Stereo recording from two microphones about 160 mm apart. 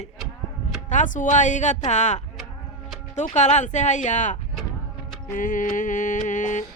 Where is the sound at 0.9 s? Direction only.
50° left (ahead or behind).